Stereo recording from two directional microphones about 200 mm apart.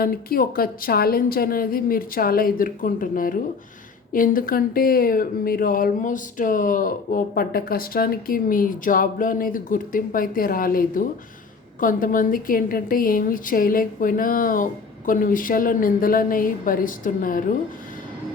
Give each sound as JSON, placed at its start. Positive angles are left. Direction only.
{"t": 0.0, "sound": "speech", "side_deg": 45}